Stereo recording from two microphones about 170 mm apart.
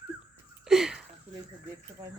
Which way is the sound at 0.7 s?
5° right (ahead or behind).